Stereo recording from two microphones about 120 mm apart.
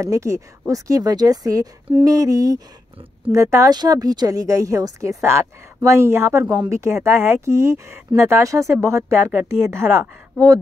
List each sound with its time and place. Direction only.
0.0 s speech: 25° right (ahead or behind)